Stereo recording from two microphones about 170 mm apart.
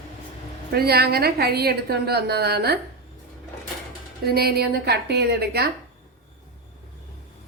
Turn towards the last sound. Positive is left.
turn(degrees=-70)  # may be behind; listen again after turning